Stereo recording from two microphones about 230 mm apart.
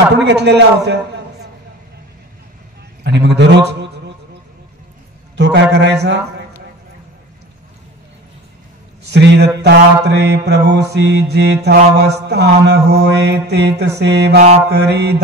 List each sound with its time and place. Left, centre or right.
0.2 s a man's voice: right
3.0 s mantra: right
5.3 s mantra: right
9.0 s a man's voice: right
10.0 s mantra: right